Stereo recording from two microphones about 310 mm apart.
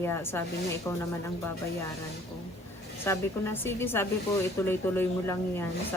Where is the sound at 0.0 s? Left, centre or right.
Centre.